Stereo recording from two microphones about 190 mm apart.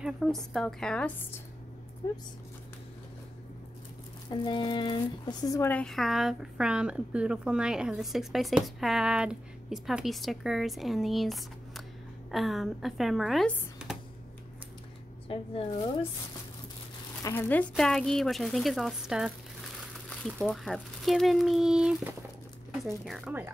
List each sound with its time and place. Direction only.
0.0 s speech: centre (ahead or behind)
2.0 s speech: 20° left (ahead or behind)
4.3 s speech: 25° left (ahead or behind); by 13.9 s centre (ahead or behind)
15.3 s speech: 30° left (ahead or behind)
17.2 s speech: 15° left (ahead or behind); by 23.5 s 5° right (ahead or behind)